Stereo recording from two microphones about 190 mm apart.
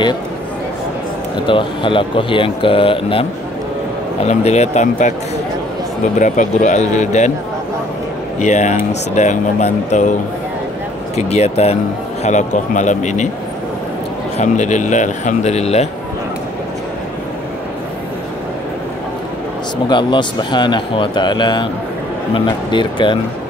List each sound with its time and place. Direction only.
1.4 s speech: 25° left (ahead or behind)
6.1 s speech: 40° left (ahead or behind)
8.4 s speech: 40° left (ahead or behind)
11.1 s speech: 35° left (ahead or behind)
14.4 s speech: 40° left (ahead or behind)
19.9 s speech: 25° left (ahead or behind)